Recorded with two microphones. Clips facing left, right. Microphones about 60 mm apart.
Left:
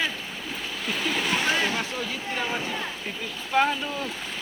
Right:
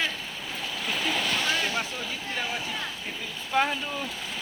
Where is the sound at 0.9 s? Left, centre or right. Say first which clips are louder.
Left 1 dB; centre.